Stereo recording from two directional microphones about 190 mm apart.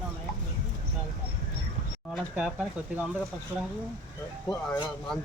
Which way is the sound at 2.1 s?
Centre (ahead or behind).